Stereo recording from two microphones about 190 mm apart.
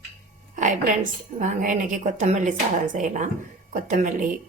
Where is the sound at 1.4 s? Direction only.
45° right (ahead or behind).